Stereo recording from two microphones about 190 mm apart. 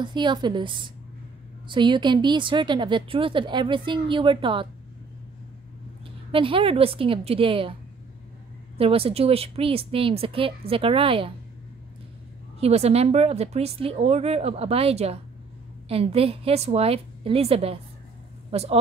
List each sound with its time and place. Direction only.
0.0 s a woman's voice: 25° right (ahead or behind)
6.3 s a woman's voice: 30° right (ahead or behind)
8.7 s a woman's voice: 30° right (ahead or behind)
12.5 s speech: 35° right (ahead or behind)